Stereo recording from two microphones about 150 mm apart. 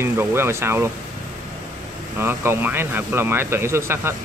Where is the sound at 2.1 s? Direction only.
15° right (ahead or behind).